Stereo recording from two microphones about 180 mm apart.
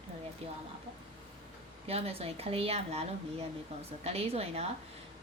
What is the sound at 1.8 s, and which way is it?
Speech, 35° right (ahead or behind).